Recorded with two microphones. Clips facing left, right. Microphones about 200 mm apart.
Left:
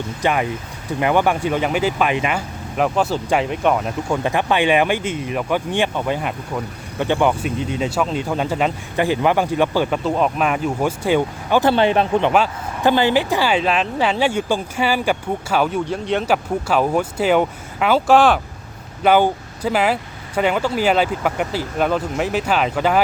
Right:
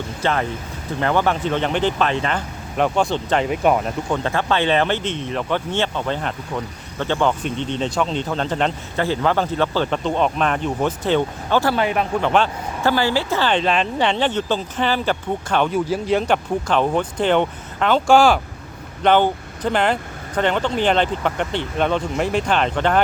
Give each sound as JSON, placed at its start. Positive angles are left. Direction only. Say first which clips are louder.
{"t": 0.2, "sound": "speech", "louder": "left 2 dB", "side_deg": 15}
{"t": 3.5, "sound": "speech", "louder": "right 1 dB", "side_deg": -5}
{"t": 4.1, "sound": "speech", "louder": "left 2 dB", "side_deg": 15}
{"t": 11.7, "sound": "speech", "louder": "left 4 dB", "side_deg": 30}